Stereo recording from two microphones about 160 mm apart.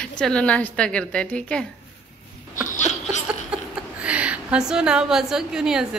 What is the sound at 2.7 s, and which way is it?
Laughter, 45° left (ahead or behind).